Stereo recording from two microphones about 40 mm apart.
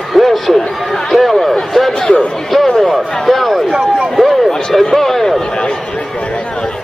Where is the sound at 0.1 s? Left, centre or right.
Centre.